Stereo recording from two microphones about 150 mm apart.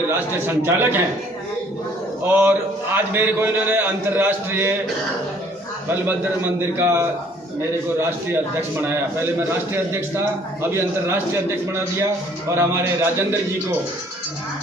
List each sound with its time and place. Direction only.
0.1 s a man's voice: 15° right (ahead or behind)
2.2 s a man's voice: 15° right (ahead or behind)
6.6 s a man's voice: 15° right (ahead or behind)
10.6 s a man's voice: 15° right (ahead or behind)